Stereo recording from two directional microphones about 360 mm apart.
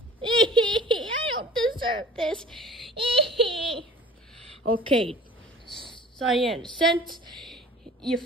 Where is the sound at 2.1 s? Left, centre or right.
Centre.